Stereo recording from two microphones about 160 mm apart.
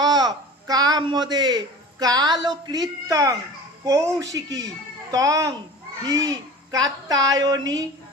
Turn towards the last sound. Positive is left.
turn(degrees=-25)  # may be behind; listen again after turning